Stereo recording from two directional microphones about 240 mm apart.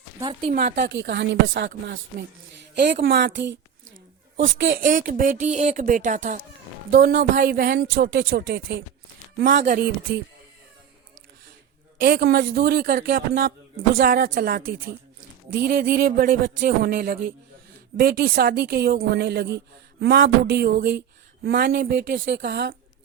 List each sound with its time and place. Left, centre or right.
0.2 s speech: centre
0.5 s a man's voice: right
0.9 s a woman's voice: right
4.9 s a man's voice: right
11.9 s a man's voice: right